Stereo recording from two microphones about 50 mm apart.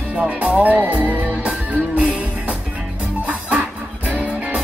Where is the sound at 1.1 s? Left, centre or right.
Right.